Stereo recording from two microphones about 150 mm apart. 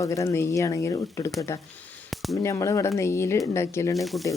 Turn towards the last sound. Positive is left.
turn(degrees=0)  # may be behind; listen again after turning